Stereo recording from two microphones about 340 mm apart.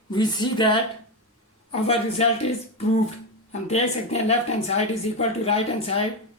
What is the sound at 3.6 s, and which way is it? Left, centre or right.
Speech, centre.